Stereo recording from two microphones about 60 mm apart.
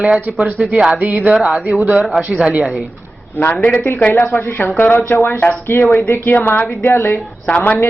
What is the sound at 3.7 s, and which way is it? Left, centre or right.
Speech, left.